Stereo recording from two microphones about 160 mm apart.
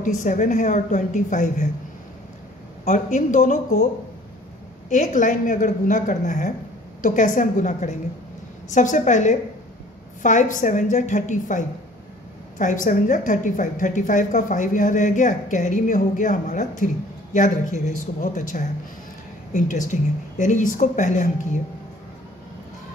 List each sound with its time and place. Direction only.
0.0 s a woman's voice: 50° left (ahead or behind)
2.8 s a woman's voice: 50° left (ahead or behind)
4.8 s a woman's voice: 50° left (ahead or behind)